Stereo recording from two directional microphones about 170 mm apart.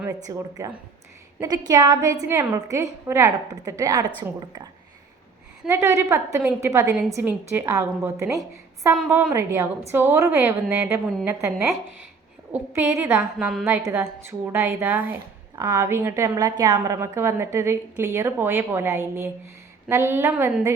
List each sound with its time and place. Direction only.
0.1 s a woman's voice: 20° right (ahead or behind)
9.0 s a woman's voice: 5° right (ahead or behind)
12.7 s a woman's voice: 15° right (ahead or behind)